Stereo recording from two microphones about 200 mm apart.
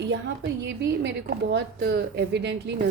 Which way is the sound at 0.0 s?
60° right (ahead or behind).